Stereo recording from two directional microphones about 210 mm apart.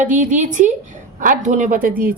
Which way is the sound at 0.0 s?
35° right (ahead or behind).